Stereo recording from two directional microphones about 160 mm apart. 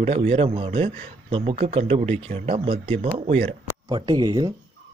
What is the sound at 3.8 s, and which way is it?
Speech, 25° right (ahead or behind).